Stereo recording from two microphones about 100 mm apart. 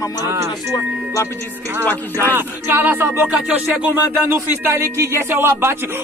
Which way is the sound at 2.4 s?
20° right (ahead or behind).